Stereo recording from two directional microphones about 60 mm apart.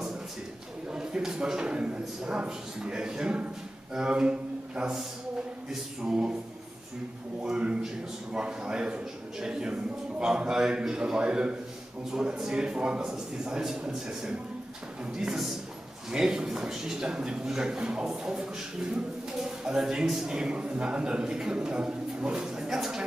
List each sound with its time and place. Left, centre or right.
0.8 s a man's voice: centre
6.0 s a man's voice: centre
7.4 s a man's voice: centre